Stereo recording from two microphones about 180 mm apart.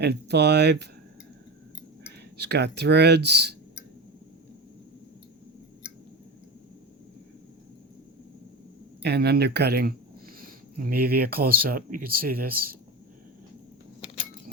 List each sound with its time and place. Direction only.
0.0 s speech: 65° right (ahead or behind)
2.4 s speech: 70° right (ahead or behind)
9.0 s speech: 65° right (ahead or behind)